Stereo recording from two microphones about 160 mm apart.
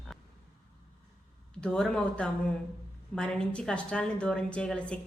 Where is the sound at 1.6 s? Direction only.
5° left (ahead or behind).